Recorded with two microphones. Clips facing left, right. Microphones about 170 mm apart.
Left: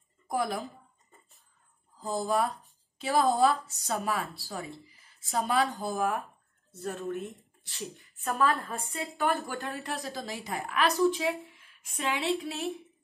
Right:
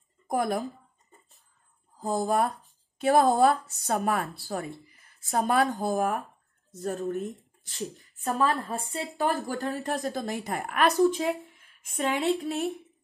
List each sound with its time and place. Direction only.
0.3 s speech: 50° right (ahead or behind)
2.0 s speech: 55° right (ahead or behind)
10.2 s speech: 55° right (ahead or behind)
11.1 s a sound: 40° right (ahead or behind)
12.0 s speech: 45° right (ahead or behind)